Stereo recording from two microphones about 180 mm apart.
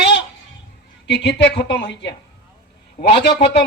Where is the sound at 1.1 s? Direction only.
75° left (ahead or behind).